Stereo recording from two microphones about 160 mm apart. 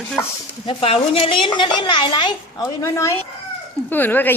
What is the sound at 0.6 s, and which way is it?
A child's voice, 35° left (ahead or behind).